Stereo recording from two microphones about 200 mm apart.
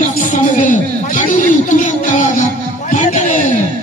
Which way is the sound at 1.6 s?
40° left (ahead or behind).